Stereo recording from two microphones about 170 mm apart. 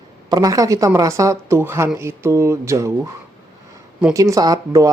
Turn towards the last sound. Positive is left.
turn(degrees=-20)  # may be behind; listen again after turning